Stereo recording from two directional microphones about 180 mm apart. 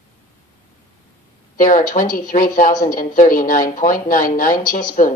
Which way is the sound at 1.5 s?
50° left (ahead or behind).